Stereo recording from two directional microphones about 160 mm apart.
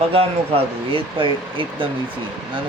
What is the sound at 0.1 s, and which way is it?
Speech, 35° right (ahead or behind).